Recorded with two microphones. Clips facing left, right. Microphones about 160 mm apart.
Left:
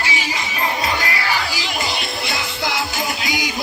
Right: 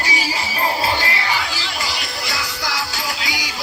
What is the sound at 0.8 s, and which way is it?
Crowd, 30° right (ahead or behind).